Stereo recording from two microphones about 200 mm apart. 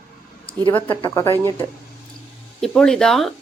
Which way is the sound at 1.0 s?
15° left (ahead or behind).